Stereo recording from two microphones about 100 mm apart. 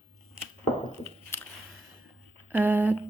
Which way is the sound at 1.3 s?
25° left (ahead or behind).